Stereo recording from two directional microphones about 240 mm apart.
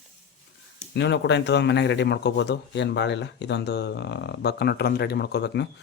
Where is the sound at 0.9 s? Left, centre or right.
Left.